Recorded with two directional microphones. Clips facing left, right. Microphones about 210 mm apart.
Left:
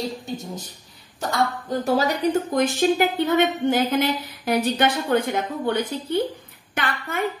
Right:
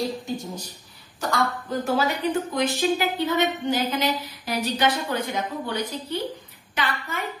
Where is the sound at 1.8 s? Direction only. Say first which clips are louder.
Left 3 dB; 40° left (ahead or behind).